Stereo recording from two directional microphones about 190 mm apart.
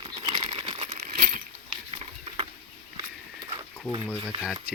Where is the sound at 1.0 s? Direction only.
45° right (ahead or behind).